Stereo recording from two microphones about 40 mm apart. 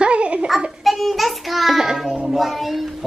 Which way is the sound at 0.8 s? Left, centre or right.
Centre.